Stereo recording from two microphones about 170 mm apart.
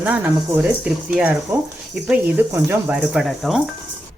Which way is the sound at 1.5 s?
15° right (ahead or behind).